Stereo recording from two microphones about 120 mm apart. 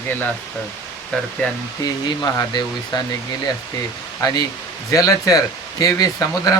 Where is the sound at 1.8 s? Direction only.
35° left (ahead or behind).